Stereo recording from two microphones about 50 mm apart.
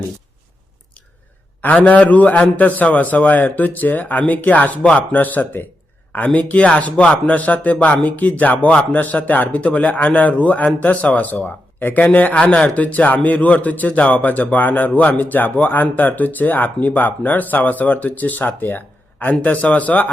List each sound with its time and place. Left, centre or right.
1.6 s speech: left